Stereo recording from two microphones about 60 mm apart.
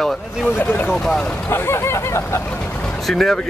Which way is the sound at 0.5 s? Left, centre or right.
Left.